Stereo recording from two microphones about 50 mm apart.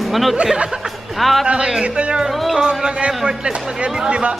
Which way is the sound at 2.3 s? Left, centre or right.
Centre.